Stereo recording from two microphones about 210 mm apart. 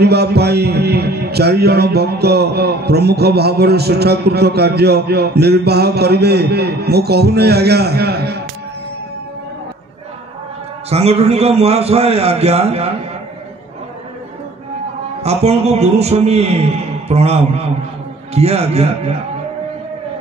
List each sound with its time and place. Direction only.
0.0 s speech: 50° right (ahead or behind)
10.9 s a man's voice: 30° right (ahead or behind)
15.2 s a man's voice: 30° right (ahead or behind)